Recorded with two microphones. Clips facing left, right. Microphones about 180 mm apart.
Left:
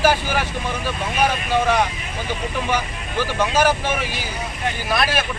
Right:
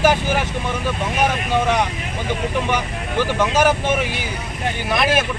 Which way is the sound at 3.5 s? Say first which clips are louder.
Right 1 dB; 20° right (ahead or behind).